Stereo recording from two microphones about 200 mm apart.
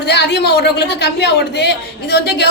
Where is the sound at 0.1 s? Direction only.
55° left (ahead or behind).